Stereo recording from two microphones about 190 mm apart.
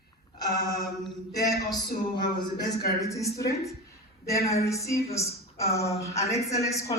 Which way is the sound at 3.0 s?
15° left (ahead or behind).